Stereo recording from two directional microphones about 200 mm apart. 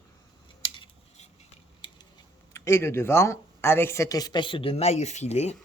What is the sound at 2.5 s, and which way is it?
Speech, 15° left (ahead or behind).